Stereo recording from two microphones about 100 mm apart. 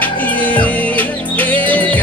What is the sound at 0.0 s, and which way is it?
Music, 15° left (ahead or behind).